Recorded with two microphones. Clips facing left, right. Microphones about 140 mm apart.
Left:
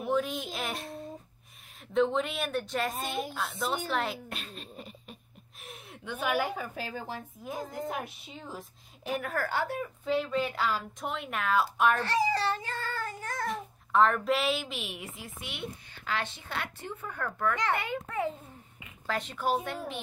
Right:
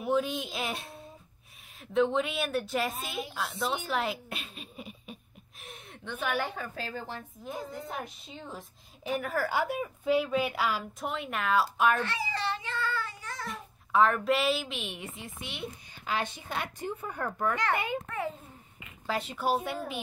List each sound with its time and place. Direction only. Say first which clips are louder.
0.0 s a woman's voice: right 1 dB; centre (ahead or behind)
2.0 s a woman's voice: right 1 dB; centre (ahead or behind)
12.0 s child singing: left 5 dB; 40° left (ahead or behind)
13.5 s speech: left 2 dB; centre (ahead or behind)
15.9 s a woman's voice: right 2 dB; 15° right (ahead or behind)
19.0 s a woman's voice: right 1 dB; 10° right (ahead or behind)